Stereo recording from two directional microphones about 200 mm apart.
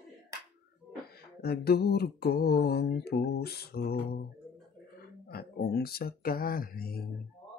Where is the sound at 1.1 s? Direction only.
50° left (ahead or behind).